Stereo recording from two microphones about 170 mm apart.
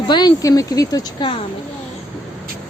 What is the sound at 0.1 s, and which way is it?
Speech, 25° left (ahead or behind).